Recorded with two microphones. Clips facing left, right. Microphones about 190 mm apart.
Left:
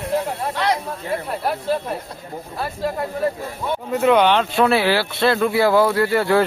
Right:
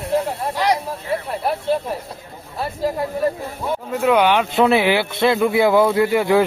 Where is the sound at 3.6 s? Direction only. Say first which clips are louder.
Left 1 dB; 5° right (ahead or behind).